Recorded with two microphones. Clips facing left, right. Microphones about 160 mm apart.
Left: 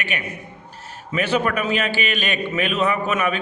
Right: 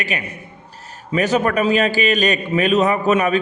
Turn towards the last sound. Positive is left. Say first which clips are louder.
# right 6 dB
turn(degrees=-35)  # may be behind; listen again after turning